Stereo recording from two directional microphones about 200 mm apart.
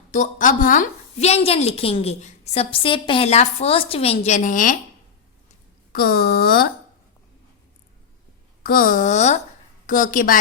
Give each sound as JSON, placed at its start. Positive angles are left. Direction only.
{"t": 0.1, "sound": "a woman's voice", "side_deg": 40}
{"t": 5.9, "sound": "speech", "side_deg": 50}
{"t": 8.6, "sound": "a woman's voice", "side_deg": 45}